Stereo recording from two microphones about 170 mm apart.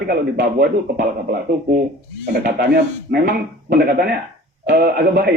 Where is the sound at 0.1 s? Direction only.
60° right (ahead or behind).